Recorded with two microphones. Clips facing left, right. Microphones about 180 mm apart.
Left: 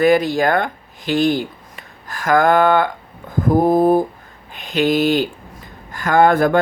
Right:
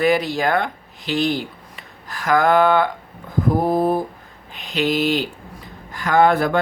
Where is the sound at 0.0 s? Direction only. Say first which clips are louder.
Left 4 dB; 50° left (ahead or behind).